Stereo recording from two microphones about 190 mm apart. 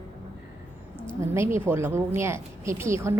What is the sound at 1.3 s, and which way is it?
Speech, 15° right (ahead or behind).